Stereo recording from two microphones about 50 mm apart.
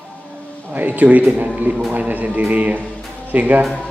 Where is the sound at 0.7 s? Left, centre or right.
Right.